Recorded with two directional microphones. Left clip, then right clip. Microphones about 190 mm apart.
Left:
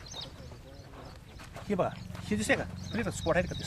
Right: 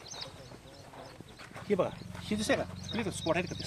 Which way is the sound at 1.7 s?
55° left (ahead or behind).